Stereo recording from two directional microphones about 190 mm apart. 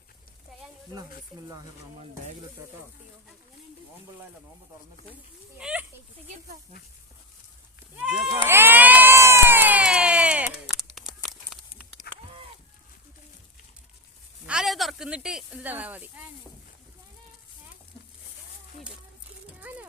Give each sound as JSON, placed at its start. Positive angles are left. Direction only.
{"t": 0.5, "sound": "sizzle", "side_deg": 0}
{"t": 1.3, "sound": "speech", "side_deg": 0}
{"t": 5.5, "sound": "speech", "side_deg": -5}
{"t": 7.9, "sound": "speech", "side_deg": -5}
{"t": 8.4, "sound": "a sound", "side_deg": -10}
{"t": 12.1, "sound": "a sound", "side_deg": 55}
{"t": 14.4, "sound": "speech", "side_deg": -5}
{"t": 19.5, "sound": "children playing", "side_deg": -5}